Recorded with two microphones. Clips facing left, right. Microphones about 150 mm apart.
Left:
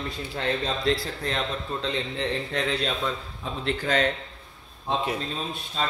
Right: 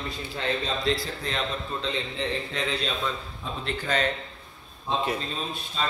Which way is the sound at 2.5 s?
60° left (ahead or behind).